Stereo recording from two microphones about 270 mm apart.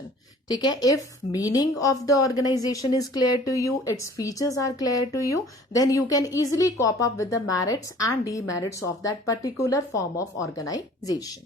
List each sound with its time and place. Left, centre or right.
0.4 s a woman's voice: centre
1.9 s speech: left
2.2 s a woman's voice: centre